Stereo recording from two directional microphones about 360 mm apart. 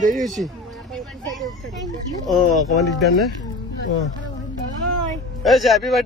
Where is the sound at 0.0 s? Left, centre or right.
Right.